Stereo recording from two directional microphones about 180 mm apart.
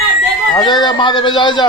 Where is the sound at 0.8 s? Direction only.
25° left (ahead or behind).